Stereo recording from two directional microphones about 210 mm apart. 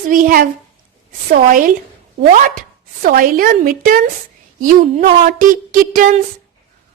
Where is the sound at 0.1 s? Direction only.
40° right (ahead or behind).